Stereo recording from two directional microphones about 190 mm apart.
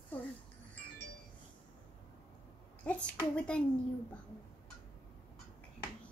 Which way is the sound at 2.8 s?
5° left (ahead or behind).